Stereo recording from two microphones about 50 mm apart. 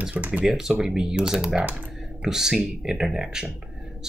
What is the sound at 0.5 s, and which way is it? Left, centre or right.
Speech, centre.